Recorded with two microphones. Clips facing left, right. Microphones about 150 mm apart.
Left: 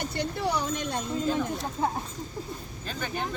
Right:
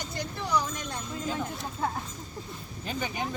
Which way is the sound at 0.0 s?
65° left (ahead or behind).